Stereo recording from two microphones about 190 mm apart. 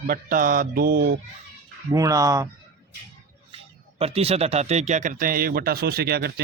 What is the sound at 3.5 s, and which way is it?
Speech, 30° right (ahead or behind).